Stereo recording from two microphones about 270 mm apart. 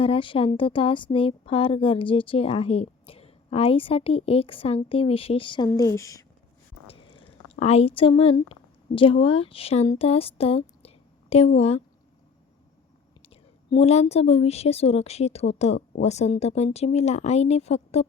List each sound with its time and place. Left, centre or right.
0.0 s speech: centre
6.8 s a sound: centre
7.6 s a woman's voice: left
13.2 s speech: left